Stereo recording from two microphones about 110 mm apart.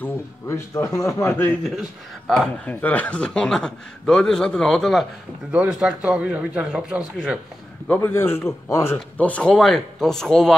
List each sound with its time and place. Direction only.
0.0 s speech: 25° left (ahead or behind)
1.8 s speech: centre (ahead or behind)
5.5 s speech: 10° right (ahead or behind)
7.9 s speech: 20° left (ahead or behind)